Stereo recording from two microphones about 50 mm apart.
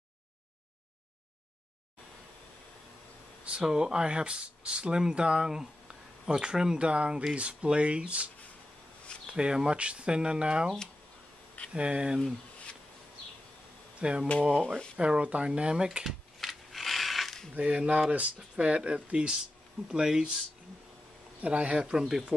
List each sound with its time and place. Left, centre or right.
3.6 s speech: centre
9.3 s speech: centre
11.7 s speech: right
14.0 s speech: centre
16.3 s a sound: centre
17.6 s speech: right
21.4 s speech: right
21.7 s speech: centre